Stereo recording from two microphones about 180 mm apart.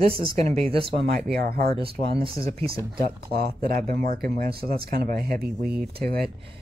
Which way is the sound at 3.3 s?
60° right (ahead or behind).